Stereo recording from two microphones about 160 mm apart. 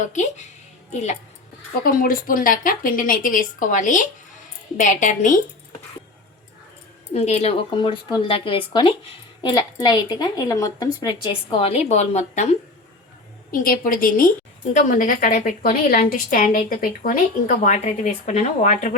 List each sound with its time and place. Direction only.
0.0 s a woman's voice: 50° left (ahead or behind)
1.8 s a woman's voice: 60° left (ahead or behind)
7.1 s speech: 40° left (ahead or behind)
7.8 s speech: 30° left (ahead or behind); by 12.5 s 45° left (ahead or behind)
13.5 s a woman's voice: 60° left (ahead or behind)